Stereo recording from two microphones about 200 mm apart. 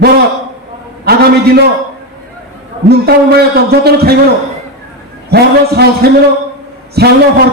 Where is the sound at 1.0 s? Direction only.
50° right (ahead or behind).